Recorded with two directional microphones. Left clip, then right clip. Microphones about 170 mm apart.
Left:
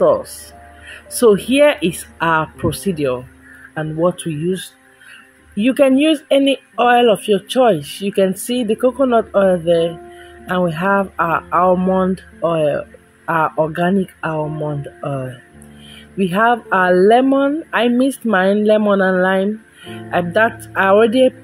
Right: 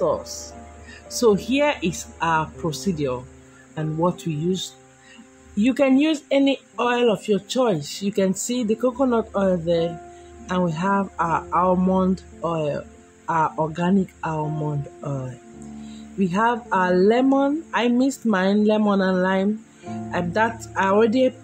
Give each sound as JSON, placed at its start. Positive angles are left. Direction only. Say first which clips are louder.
{"t": 1.1, "sound": "speech", "louder": "left 7 dB", "side_deg": 20}
{"t": 5.6, "sound": "speech", "louder": "left 6 dB", "side_deg": 15}
{"t": 16.2, "sound": "speech", "louder": "left 7 dB", "side_deg": 15}